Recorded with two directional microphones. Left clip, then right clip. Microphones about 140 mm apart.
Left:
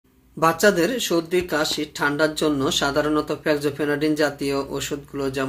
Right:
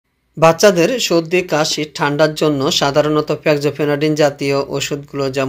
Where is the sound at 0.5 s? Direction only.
35° right (ahead or behind).